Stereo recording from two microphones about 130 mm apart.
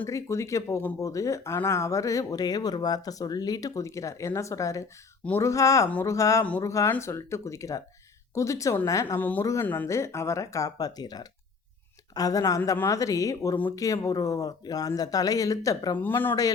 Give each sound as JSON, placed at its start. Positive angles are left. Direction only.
{"t": 0.0, "sound": "speech", "side_deg": 25}
{"t": 9.2, "sound": "speech", "side_deg": 15}
{"t": 16.0, "sound": "speech", "side_deg": 15}